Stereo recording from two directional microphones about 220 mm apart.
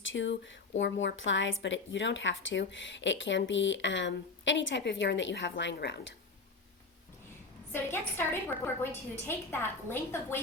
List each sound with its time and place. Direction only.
0.0 s speech: 55° left (ahead or behind)
7.7 s a woman's voice: 10° left (ahead or behind)